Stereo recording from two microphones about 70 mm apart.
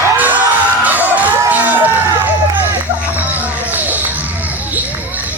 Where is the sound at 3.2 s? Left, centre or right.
Right.